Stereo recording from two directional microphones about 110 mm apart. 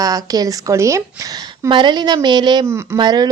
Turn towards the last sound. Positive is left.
turn(degrees=-40)  # may be behind; listen again after turning